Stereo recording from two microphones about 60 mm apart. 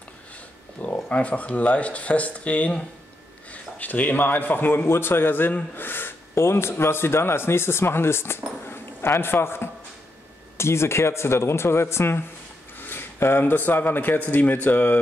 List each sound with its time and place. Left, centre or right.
1.0 s a man's voice: left